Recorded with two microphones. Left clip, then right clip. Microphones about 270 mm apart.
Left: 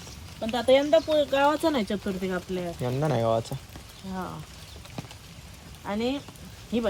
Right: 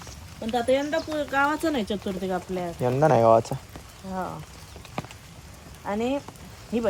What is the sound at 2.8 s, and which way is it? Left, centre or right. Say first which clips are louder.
Speech: right 8 dB; right.